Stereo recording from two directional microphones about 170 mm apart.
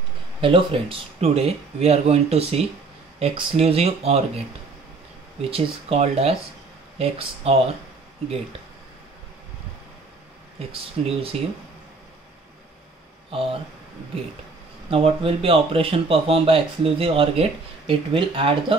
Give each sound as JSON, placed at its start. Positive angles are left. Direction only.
{"t": 0.4, "sound": "speech", "side_deg": -30}
{"t": 5.4, "sound": "speech", "side_deg": -35}
{"t": 10.7, "sound": "speech", "side_deg": -35}
{"t": 13.3, "sound": "speech", "side_deg": -35}
{"t": 14.9, "sound": "speech", "side_deg": -35}